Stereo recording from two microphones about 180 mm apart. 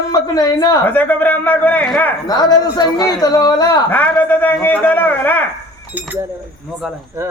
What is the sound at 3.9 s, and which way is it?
A man's voice, 10° left (ahead or behind).